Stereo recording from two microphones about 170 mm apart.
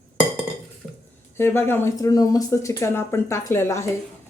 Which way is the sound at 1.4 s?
15° left (ahead or behind).